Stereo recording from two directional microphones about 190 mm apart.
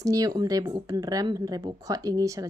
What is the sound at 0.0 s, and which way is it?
Speech, 20° right (ahead or behind).